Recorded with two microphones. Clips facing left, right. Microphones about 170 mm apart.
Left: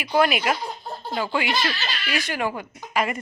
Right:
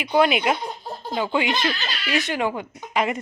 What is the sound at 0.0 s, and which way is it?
Speech, 20° right (ahead or behind).